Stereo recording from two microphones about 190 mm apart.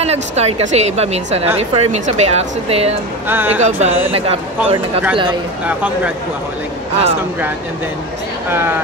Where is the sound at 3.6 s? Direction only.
35° right (ahead or behind).